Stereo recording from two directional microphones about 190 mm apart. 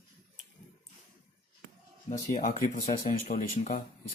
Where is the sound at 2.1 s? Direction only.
40° left (ahead or behind).